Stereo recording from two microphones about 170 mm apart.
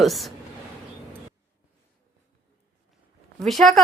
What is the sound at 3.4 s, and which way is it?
Speech, centre (ahead or behind).